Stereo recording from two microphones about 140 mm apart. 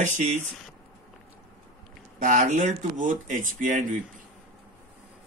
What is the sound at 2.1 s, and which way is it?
Speech, 65° right (ahead or behind).